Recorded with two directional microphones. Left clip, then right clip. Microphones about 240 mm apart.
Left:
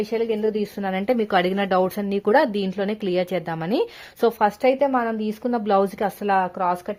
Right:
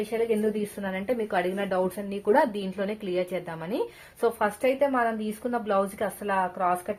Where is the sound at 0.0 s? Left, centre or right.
Left.